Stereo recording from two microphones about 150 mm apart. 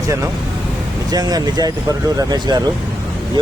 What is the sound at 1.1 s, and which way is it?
Speech, 25° right (ahead or behind).